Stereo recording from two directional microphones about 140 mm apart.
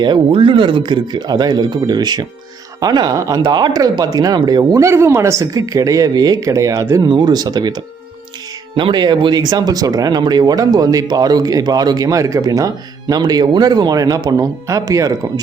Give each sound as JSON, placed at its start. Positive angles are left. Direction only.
{"t": 0.0, "sound": "speech", "side_deg": -35}